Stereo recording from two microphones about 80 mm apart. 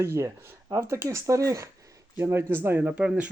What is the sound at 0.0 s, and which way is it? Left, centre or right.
Speech, right.